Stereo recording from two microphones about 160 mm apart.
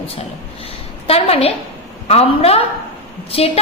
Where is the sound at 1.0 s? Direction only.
40° left (ahead or behind).